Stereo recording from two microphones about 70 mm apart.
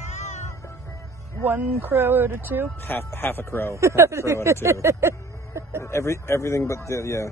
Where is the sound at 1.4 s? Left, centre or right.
Right.